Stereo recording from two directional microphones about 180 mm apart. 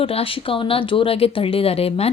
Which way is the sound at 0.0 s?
30° left (ahead or behind).